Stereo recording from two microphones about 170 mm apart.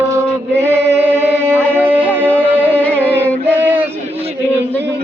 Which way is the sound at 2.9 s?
10° right (ahead or behind).